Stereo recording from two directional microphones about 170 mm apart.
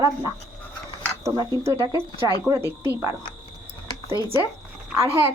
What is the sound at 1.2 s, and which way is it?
A woman's voice, 20° right (ahead or behind).